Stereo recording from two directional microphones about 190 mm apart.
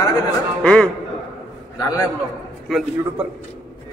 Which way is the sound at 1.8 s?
20° left (ahead or behind).